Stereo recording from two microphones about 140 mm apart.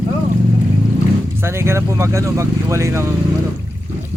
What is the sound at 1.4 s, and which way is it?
Speech, 20° right (ahead or behind).